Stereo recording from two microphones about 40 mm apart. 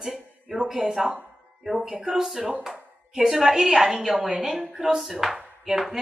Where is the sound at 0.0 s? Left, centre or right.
Centre.